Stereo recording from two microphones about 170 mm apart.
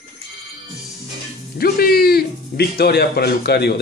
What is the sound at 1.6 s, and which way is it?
Speech, 65° left (ahead or behind).